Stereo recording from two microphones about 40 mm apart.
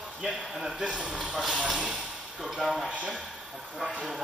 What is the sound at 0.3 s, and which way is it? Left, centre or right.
Speech, centre.